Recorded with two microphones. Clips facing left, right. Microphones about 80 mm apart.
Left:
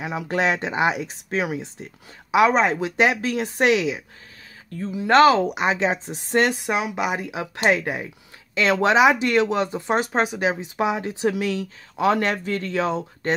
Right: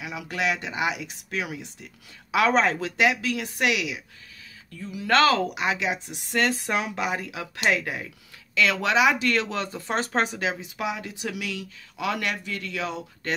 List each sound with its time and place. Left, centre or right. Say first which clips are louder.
0.0 s speech: left 6 dB; left
6.5 s speech: left 3 dB; centre
10.0 s speech: left 3 dB; centre
10.4 s speech: left 6 dB; left